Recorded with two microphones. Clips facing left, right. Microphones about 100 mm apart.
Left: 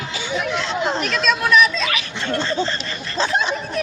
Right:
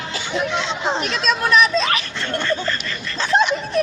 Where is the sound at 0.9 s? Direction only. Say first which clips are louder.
Right 2 dB; 30° right (ahead or behind).